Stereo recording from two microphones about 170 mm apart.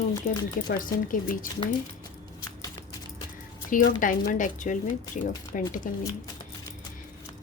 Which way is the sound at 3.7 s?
50° left (ahead or behind).